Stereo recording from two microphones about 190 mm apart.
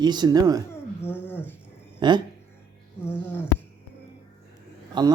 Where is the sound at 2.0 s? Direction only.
25° right (ahead or behind).